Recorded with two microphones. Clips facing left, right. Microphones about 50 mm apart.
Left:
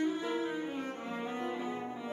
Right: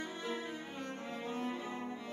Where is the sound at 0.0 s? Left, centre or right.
Centre.